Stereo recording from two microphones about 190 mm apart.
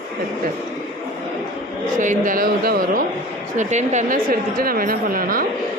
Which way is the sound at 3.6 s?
40° right (ahead or behind).